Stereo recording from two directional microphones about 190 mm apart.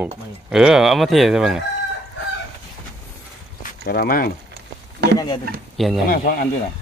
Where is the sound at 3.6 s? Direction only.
50° left (ahead or behind).